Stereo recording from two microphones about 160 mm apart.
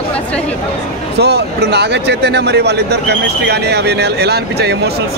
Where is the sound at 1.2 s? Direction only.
90° right.